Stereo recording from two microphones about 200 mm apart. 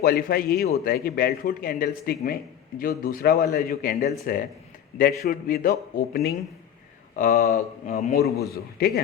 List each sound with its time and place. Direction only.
0.0 s a man's voice: 50° left (ahead or behind)